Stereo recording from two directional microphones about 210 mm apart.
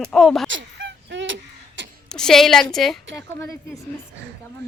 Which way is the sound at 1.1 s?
60° right (ahead or behind).